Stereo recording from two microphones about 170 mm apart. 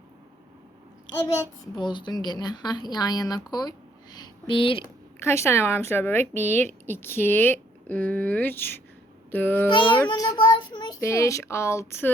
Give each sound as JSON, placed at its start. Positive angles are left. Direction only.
{"t": 1.4, "sound": "a child's voice", "side_deg": 25}
{"t": 5.2, "sound": "child singing", "side_deg": 15}
{"t": 10.1, "sound": "child singing", "side_deg": 25}